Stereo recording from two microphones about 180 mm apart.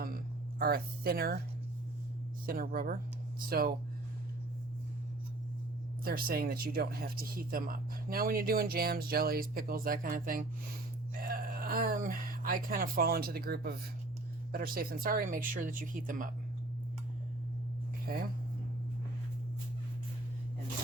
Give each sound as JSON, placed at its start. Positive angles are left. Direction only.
{"t": 0.6, "sound": "speech", "side_deg": -55}
{"t": 2.5, "sound": "speech", "side_deg": -50}
{"t": 6.1, "sound": "speech", "side_deg": -55}